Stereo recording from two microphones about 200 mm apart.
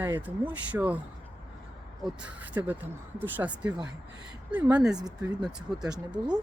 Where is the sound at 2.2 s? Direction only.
10° right (ahead or behind).